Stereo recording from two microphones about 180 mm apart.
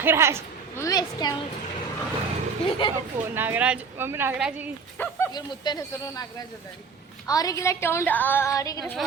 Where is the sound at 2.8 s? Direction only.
25° left (ahead or behind).